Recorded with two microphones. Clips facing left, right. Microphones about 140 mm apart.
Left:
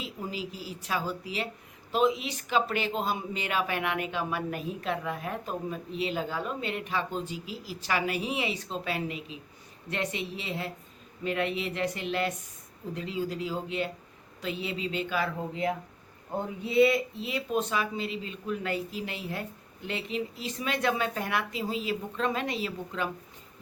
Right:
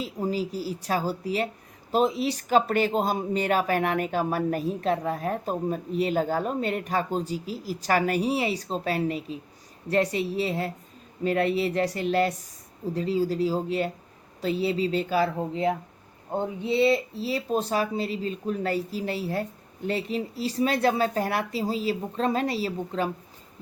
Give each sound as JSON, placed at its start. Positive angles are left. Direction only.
{"t": 0.0, "sound": "speech", "side_deg": -40}